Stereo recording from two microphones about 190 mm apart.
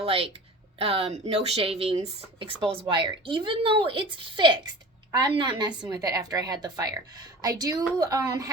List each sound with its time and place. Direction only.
0.0 s a woman's voice: 30° right (ahead or behind)